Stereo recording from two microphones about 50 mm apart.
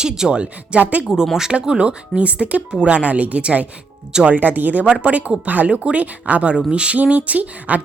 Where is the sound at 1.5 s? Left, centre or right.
Right.